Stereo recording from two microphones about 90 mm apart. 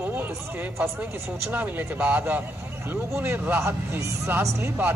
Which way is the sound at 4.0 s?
35° right (ahead or behind).